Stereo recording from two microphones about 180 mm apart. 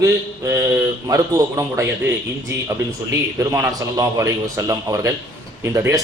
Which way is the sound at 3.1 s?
15° right (ahead or behind).